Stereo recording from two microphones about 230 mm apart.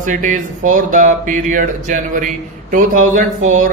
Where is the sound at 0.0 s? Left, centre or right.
Right.